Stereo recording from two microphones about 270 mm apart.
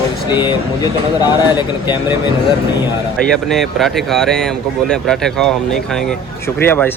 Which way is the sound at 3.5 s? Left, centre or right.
Centre.